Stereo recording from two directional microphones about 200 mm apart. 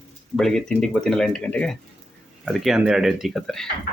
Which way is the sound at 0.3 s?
5° left (ahead or behind).